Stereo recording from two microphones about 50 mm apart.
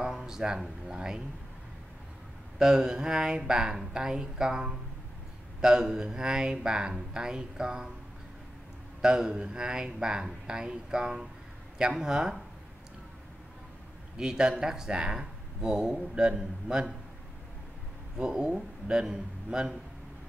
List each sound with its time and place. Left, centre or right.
0.0 s speech: centre
2.6 s speech: centre
9.0 s speech: centre
14.1 s speech: centre
18.1 s speech: centre